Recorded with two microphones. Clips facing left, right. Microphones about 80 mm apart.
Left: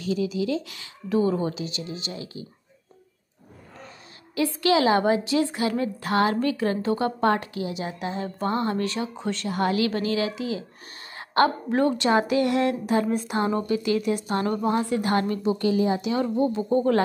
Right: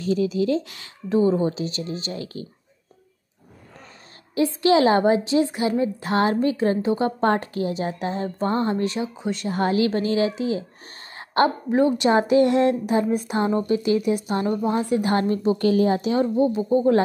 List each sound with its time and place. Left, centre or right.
0.0 s a woman's voice: right
4.4 s a woman's voice: right
9.5 s a woman's voice: right
15.5 s speech: right
16.0 s a woman's voice: right
16.3 s speech: centre